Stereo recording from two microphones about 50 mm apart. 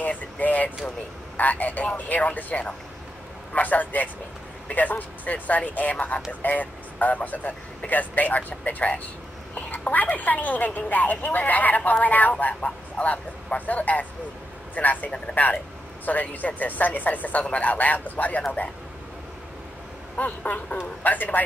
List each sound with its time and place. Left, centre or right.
0.4 s speech: left
15.0 s speech: left
16.1 s speech: left
20.2 s speech: left